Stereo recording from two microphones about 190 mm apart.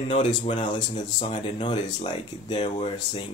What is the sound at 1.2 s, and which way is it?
Speech, 25° left (ahead or behind).